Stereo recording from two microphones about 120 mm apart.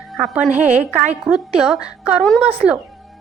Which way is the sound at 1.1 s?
5° right (ahead or behind).